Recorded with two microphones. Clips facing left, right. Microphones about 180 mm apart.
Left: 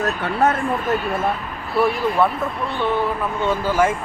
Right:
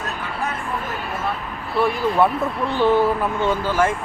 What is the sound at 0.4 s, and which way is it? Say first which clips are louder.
Speech: left 10 dB; 70° left (ahead or behind).